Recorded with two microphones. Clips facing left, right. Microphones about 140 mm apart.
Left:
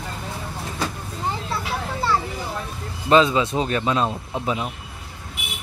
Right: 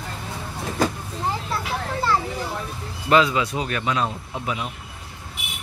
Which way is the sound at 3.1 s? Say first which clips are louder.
Left 2 dB; 25° left (ahead or behind).